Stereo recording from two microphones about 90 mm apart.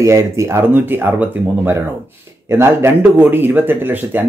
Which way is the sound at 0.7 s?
20° right (ahead or behind).